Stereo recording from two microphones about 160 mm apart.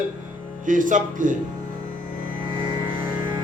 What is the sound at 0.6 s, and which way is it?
Speech, 55° right (ahead or behind).